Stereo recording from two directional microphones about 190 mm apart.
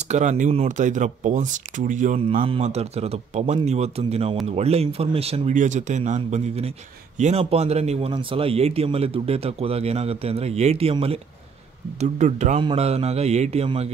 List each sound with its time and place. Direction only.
0.0 s speech: 35° right (ahead or behind)